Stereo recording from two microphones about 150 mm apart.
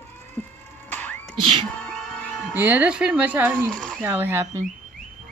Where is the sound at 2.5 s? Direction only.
10° right (ahead or behind).